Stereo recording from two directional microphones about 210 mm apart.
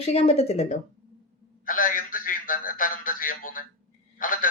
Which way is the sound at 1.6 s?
40° left (ahead or behind).